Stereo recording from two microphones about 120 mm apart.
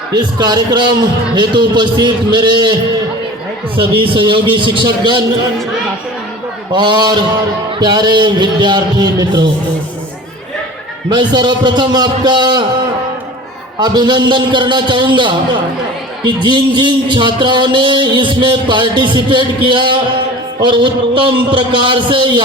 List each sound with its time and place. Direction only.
0.1 s a man's voice: 35° right (ahead or behind)
3.8 s a man's voice: 45° right (ahead or behind)
6.7 s a man's voice: 40° right (ahead or behind)
11.1 s a man's voice: 40° right (ahead or behind)
13.7 s a man's voice: 35° right (ahead or behind)